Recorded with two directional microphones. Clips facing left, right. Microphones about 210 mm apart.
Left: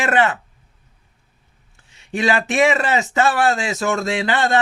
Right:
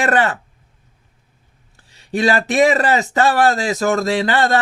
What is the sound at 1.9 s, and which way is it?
Speech, 35° right (ahead or behind).